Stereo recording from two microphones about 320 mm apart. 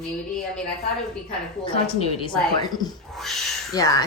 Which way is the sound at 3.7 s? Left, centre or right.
Centre.